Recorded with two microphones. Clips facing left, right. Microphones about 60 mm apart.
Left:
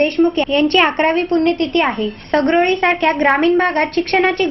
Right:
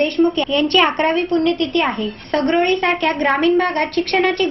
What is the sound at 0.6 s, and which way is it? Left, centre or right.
Speech, left.